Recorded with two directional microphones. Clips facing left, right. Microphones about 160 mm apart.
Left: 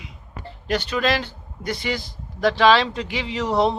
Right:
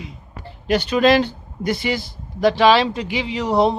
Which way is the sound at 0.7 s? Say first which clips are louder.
Right 7 dB; 15° right (ahead or behind).